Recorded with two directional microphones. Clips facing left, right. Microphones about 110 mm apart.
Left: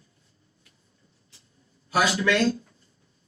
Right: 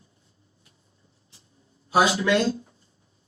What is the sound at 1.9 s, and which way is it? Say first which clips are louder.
Speech: right 2 dB; 20° right (ahead or behind).